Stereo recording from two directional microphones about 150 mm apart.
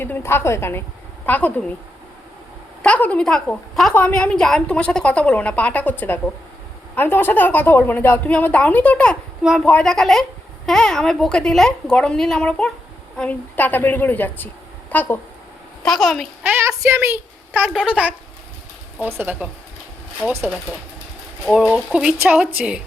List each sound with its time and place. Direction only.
0.0 s a woman's voice: 15° left (ahead or behind)
2.8 s a woman's voice: 10° left (ahead or behind)
9.4 s a woman's voice: 5° right (ahead or behind)
9.6 s a woman's voice: 5° left (ahead or behind)
15.8 s a woman's voice: centre (ahead or behind)
16.4 s a woman's voice: 15° right (ahead or behind)
17.6 s speech: 5° right (ahead or behind)